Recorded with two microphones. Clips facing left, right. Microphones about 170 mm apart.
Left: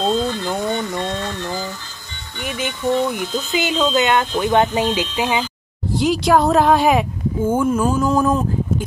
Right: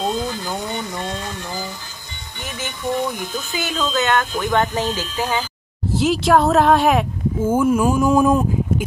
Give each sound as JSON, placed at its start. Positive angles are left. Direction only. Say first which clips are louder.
{"t": 0.0, "sound": "a sound", "louder": "left 4 dB", "side_deg": -15}
{"t": 2.4, "sound": "music", "louder": "left 5 dB", "side_deg": 15}
{"t": 3.3, "sound": "speech", "louder": "left 7 dB", "side_deg": 20}
{"t": 5.9, "sound": "speech", "louder": "even", "side_deg": 0}